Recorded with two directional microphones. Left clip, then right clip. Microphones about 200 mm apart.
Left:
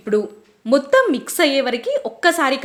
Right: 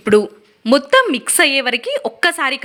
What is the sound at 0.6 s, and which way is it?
A woman's voice, 15° right (ahead or behind).